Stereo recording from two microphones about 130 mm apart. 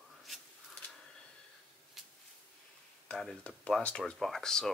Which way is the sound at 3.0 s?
5° left (ahead or behind).